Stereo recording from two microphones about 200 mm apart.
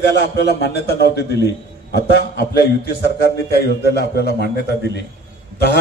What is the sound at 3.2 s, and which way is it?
A man's voice, 55° left (ahead or behind).